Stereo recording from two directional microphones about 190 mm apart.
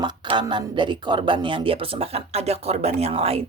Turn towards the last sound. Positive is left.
turn(degrees=-30)  # may be behind; listen again after turning